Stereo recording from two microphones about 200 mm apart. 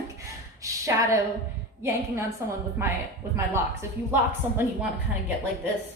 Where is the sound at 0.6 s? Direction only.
15° right (ahead or behind).